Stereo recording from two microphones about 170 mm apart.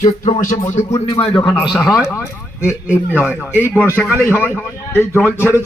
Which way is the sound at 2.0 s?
15° left (ahead or behind).